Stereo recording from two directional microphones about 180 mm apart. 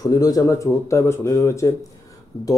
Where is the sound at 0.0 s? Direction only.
20° left (ahead or behind).